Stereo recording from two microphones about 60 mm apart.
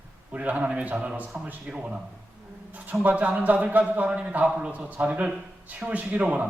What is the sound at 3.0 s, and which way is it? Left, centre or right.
A man's voice, right.